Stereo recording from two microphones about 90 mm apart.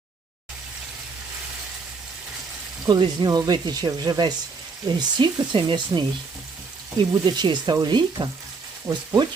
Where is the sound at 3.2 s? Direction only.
45° right (ahead or behind).